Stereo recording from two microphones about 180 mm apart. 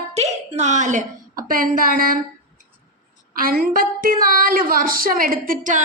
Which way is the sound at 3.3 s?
55° right (ahead or behind).